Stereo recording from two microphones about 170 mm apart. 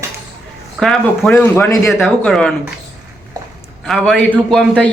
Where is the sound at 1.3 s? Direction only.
15° left (ahead or behind).